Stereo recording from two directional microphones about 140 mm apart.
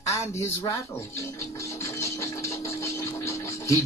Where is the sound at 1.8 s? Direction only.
20° left (ahead or behind).